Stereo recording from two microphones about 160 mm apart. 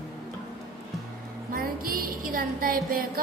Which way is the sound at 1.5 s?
65° right (ahead or behind).